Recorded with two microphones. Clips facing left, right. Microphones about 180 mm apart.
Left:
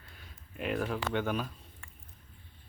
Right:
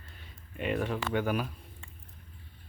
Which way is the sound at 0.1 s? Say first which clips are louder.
Right 1 dB; centre (ahead or behind).